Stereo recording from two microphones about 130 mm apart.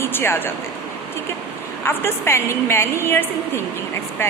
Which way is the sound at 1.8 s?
20° left (ahead or behind).